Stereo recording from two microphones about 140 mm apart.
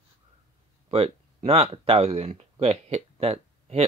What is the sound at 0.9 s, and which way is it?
Speech, 45° right (ahead or behind).